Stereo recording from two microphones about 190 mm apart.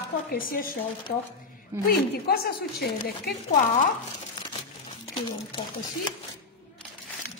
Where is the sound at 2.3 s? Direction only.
55° left (ahead or behind).